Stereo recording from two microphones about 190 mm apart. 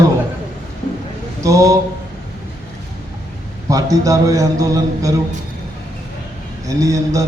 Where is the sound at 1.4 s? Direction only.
15° right (ahead or behind).